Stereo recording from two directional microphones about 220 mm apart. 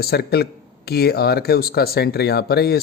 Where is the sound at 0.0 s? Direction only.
45° left (ahead or behind).